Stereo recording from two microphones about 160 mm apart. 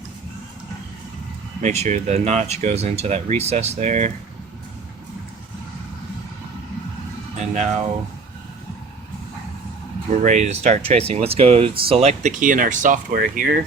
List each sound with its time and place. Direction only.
1.6 s speech: 45° right (ahead or behind)
7.3 s music: 45° right (ahead or behind)
10.1 s speech: 50° right (ahead or behind); by 13.6 s 65° right (ahead or behind)